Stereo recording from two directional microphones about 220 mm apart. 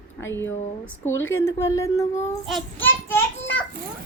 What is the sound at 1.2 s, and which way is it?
Speech, 65° left (ahead or behind).